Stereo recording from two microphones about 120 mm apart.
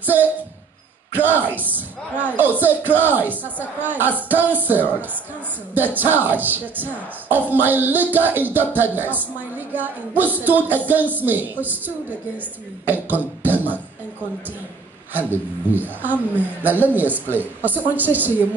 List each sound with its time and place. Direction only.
0.0 s a man's voice: 15° right (ahead or behind)
12.8 s a sound: 15° right (ahead or behind)
15.1 s speech: 15° right (ahead or behind)